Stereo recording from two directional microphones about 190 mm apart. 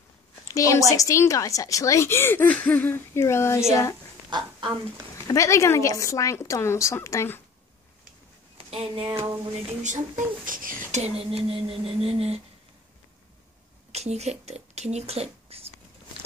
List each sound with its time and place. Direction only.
0.6 s a woman's voice: 15° left (ahead or behind)
4.3 s speech: 25° right (ahead or behind)
5.3 s a woman's voice: 15° left (ahead or behind)
8.5 s speech: 30° right (ahead or behind)
9.7 s speech: 40° right (ahead or behind)
13.9 s speech: 35° right (ahead or behind)